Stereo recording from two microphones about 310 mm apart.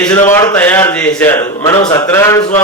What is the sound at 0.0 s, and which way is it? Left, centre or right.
A man's voice, centre.